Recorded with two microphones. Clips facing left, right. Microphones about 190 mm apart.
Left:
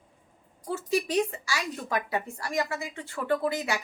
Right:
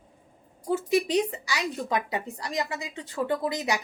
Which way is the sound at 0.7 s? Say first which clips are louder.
Right 4 dB; 20° right (ahead or behind).